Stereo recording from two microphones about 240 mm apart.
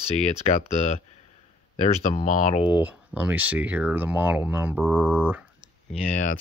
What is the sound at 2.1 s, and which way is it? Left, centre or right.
Speech, left.